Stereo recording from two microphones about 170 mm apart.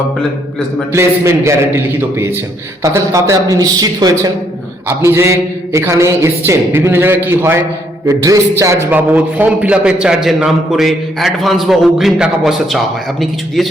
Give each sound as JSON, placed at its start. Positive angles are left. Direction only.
{"t": 0.9, "sound": "a man's voice", "side_deg": -15}